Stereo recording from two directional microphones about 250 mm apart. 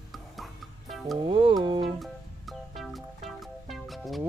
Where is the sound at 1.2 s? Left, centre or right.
Centre.